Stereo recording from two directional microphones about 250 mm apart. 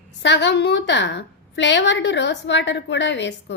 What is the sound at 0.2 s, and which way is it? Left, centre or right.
A woman's voice, left.